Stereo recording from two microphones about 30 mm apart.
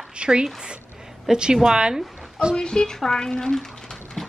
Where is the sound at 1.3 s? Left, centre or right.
Right.